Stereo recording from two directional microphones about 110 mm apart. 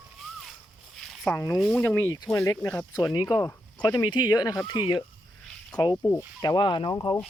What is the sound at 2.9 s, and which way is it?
Speech, 35° left (ahead or behind).